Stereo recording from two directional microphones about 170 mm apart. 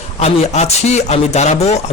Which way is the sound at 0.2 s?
40° left (ahead or behind).